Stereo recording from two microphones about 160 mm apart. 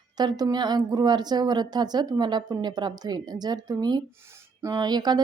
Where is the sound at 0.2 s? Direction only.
25° right (ahead or behind).